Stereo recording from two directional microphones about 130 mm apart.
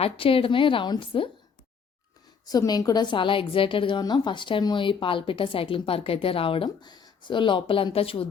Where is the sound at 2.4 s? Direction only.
30° left (ahead or behind).